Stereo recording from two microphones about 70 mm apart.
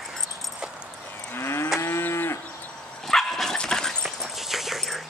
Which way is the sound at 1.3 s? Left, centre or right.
Left.